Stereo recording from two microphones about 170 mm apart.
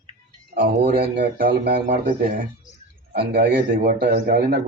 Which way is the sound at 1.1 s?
70° right (ahead or behind).